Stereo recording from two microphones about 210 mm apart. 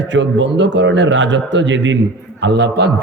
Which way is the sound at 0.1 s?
60° right (ahead or behind).